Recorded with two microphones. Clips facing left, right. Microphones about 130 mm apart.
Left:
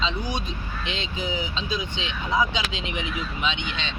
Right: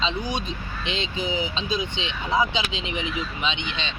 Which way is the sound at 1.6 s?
20° right (ahead or behind).